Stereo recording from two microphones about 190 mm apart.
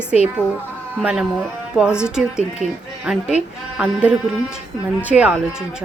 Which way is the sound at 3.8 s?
5° right (ahead or behind).